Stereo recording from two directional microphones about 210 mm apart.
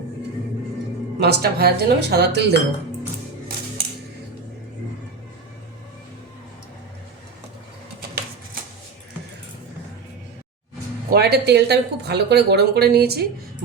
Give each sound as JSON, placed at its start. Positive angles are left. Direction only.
{"t": 1.2, "sound": "speech", "side_deg": -50}
{"t": 11.1, "sound": "speech", "side_deg": -50}